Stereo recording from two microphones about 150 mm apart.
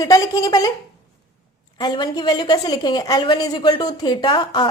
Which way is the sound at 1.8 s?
30° left (ahead or behind).